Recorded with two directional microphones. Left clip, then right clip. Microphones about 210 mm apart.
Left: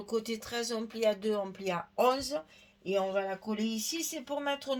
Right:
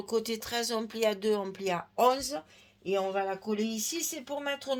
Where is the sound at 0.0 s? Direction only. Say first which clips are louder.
Right 3 dB; 35° right (ahead or behind).